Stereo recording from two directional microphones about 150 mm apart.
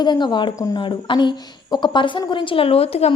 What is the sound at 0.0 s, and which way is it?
A woman's voice, 30° left (ahead or behind).